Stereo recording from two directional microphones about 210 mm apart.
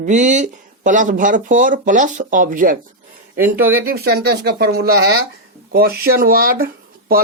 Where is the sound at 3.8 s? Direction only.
50° right (ahead or behind).